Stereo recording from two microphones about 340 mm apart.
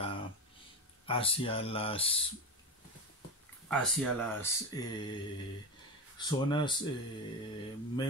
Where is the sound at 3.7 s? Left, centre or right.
Centre.